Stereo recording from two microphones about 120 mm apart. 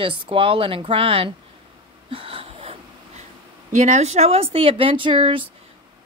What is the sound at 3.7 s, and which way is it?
Speech, 75° right (ahead or behind).